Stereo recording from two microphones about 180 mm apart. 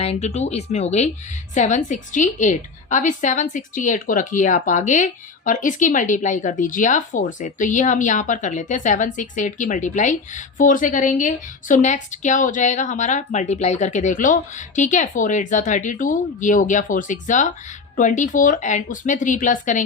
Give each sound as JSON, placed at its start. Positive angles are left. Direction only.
{"t": 0.0, "sound": "a woman's voice", "side_deg": 35}